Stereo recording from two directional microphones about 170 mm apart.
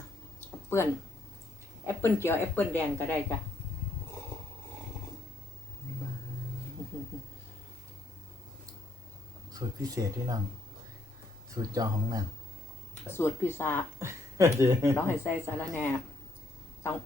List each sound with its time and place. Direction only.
0.3 s a sound: 15° left (ahead or behind)
1.9 s speech: 15° left (ahead or behind)
9.5 s speech: 20° right (ahead or behind)
11.5 s speech: 20° right (ahead or behind)
12.9 s speech: 15° left (ahead or behind)
14.0 s speech: 15° right (ahead or behind)
14.9 s speech: 15° left (ahead or behind)